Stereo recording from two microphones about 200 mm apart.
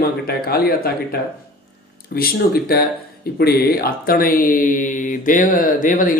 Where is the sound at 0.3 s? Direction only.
50° left (ahead or behind).